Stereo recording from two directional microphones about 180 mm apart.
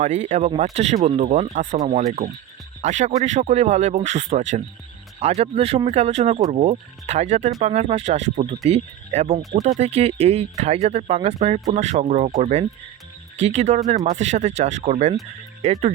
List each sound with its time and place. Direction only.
0.0 s a man's voice: 40° right (ahead or behind)
2.8 s a man's voice: 40° right (ahead or behind)